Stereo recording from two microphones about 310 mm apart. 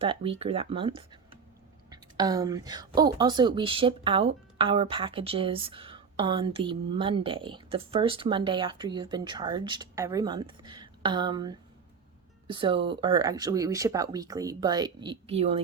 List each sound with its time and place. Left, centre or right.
0.0 s speech: centre